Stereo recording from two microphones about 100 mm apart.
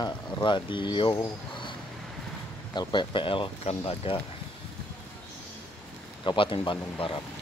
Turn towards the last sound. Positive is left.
turn(degrees=55)  # may be behind; listen again after turning